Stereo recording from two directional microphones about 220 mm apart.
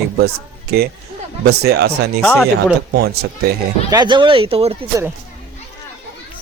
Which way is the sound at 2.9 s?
45° right (ahead or behind).